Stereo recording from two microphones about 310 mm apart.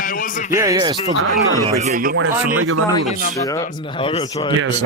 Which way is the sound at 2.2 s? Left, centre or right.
Right.